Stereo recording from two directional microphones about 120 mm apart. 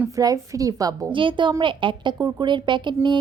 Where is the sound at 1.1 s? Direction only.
45° right (ahead or behind).